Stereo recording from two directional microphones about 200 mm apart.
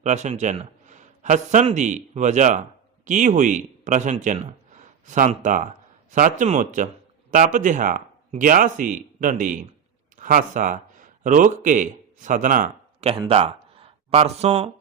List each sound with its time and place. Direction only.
0.0 s a man's voice: 35° right (ahead or behind)